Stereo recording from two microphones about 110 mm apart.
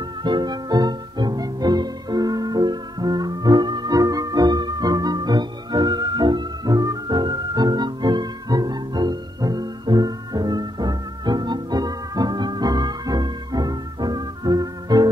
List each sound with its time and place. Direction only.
0.2 s music: 40° right (ahead or behind)